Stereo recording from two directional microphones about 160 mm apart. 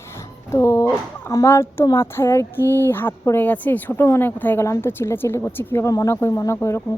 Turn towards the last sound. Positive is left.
turn(degrees=15)  # may be behind; listen again after turning